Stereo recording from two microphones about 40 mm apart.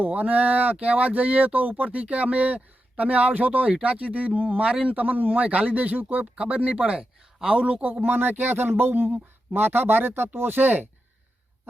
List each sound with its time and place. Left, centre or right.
0.0 s speech: right
4.6 s speech: right
6.3 s speech: right